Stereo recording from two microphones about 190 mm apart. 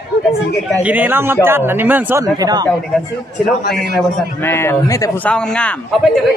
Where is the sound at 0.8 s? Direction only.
10° right (ahead or behind).